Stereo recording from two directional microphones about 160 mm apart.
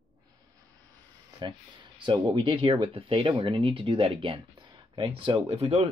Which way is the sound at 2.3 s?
30° right (ahead or behind).